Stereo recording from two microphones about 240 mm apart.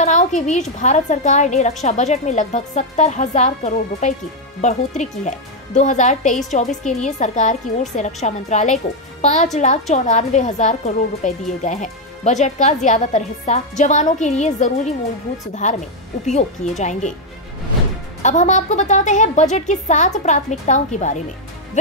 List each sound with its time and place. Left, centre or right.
0.0 s a woman's voice: left
18.2 s a woman's voice: left